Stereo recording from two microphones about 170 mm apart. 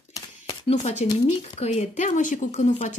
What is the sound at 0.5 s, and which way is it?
A woman's voice, 40° left (ahead or behind).